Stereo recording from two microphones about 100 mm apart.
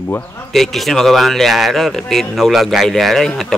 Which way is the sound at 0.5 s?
Centre (ahead or behind).